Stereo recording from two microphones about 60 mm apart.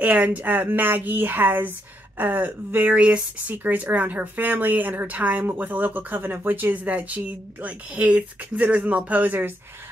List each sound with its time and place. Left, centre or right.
0.0 s speech: right